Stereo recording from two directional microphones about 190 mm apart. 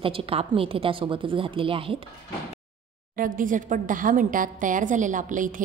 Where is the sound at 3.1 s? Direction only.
45° right (ahead or behind).